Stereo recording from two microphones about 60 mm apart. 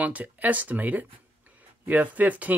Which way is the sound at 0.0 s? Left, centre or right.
Right.